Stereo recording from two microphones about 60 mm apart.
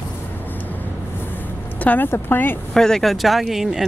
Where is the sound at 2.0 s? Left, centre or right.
Left.